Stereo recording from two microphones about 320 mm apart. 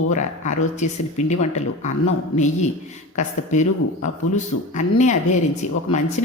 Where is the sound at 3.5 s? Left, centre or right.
Left.